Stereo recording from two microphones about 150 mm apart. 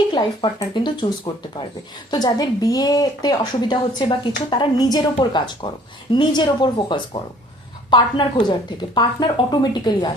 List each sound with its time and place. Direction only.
0.1 s a woman's voice: 30° left (ahead or behind)